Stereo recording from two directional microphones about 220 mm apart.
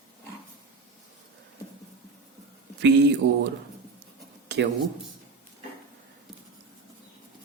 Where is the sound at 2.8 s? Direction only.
50° right (ahead or behind).